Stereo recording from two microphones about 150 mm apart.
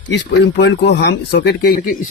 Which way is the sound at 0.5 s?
90° left.